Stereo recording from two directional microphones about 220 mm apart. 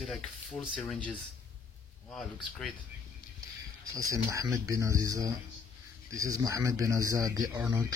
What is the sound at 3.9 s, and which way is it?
Speech, 15° right (ahead or behind).